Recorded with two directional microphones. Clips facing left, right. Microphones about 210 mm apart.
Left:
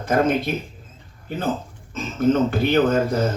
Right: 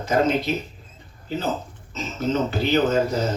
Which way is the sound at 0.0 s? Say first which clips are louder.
Left 1 dB; 55° left (ahead or behind).